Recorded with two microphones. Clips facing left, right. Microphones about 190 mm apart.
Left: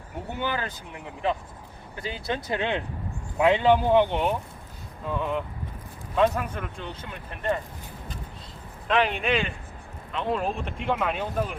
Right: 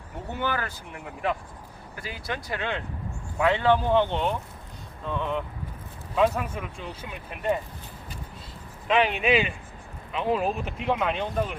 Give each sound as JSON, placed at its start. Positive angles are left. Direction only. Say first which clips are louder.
{"t": 0.3, "sound": "speech", "louder": "right 1 dB", "side_deg": 20}
{"t": 8.9, "sound": "speech", "louder": "right 2 dB", "side_deg": 0}